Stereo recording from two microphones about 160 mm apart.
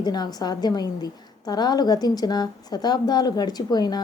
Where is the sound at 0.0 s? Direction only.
25° left (ahead or behind).